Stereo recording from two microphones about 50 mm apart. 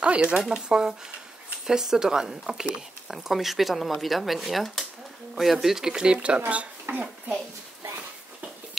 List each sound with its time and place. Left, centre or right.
0.0 s speech: right
6.9 s a child's voice: right